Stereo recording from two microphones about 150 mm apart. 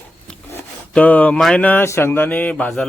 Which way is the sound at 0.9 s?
10° left (ahead or behind).